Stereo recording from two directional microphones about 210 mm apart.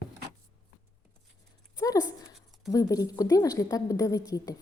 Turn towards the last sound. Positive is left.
turn(degrees=15)  # may be behind; listen again after turning